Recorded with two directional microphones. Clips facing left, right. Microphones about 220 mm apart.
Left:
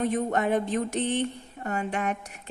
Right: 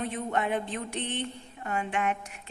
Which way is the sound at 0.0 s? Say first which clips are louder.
Left 5 dB; 45° left (ahead or behind).